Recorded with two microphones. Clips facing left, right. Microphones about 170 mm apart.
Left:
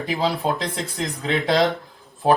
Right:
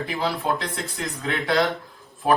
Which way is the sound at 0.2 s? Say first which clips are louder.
Left 2 dB; 25° left (ahead or behind).